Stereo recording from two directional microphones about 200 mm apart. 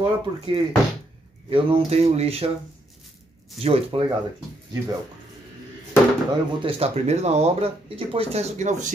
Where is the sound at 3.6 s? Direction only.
30° right (ahead or behind).